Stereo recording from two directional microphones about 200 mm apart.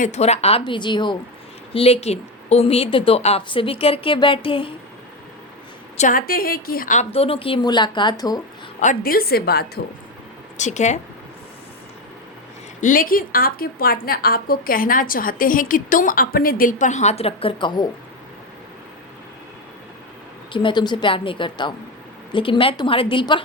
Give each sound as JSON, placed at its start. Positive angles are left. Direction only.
{"t": 0.0, "sound": "a woman's voice", "side_deg": 35}
{"t": 6.0, "sound": "a woman's voice", "side_deg": 45}
{"t": 8.8, "sound": "a woman's voice", "side_deg": 45}
{"t": 10.6, "sound": "speech", "side_deg": 35}
{"t": 12.8, "sound": "a woman's voice", "side_deg": 45}
{"t": 20.5, "sound": "a woman's voice", "side_deg": 25}